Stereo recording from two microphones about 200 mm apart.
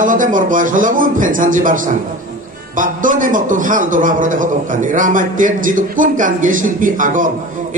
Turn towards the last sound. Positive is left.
turn(degrees=-40)  # may be behind; listen again after turning